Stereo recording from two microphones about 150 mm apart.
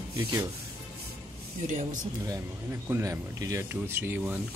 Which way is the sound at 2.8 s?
20° right (ahead or behind).